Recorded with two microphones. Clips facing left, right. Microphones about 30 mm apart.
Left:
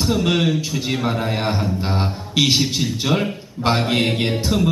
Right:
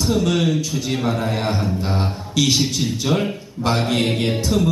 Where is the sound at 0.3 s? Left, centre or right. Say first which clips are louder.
Even; centre.